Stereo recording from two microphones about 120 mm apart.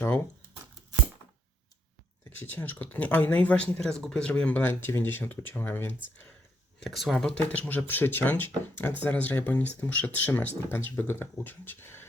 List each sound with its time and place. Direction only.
2.4 s speech: 15° left (ahead or behind)
6.7 s speech: centre (ahead or behind); by 12.0 s 20° left (ahead or behind)